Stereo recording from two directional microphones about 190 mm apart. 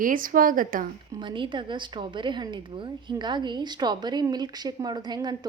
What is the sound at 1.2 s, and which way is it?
A woman's voice, 25° right (ahead or behind).